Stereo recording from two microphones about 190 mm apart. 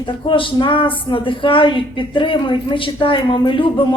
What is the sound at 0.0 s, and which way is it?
A woman's voice, 25° left (ahead or behind).